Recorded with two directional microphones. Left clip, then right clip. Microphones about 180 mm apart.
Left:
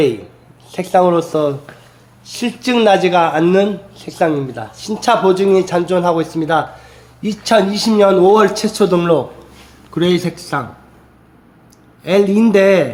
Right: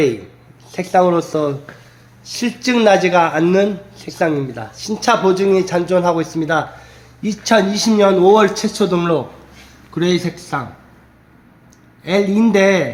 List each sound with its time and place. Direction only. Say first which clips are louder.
0.7 s a man's voice: left 1 dB; 5° left (ahead or behind); by 10.7 s 25° left (ahead or behind)
12.0 s speech: left 3 dB; 30° left (ahead or behind)